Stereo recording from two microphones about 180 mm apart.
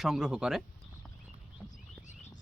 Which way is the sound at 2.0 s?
40° left (ahead or behind).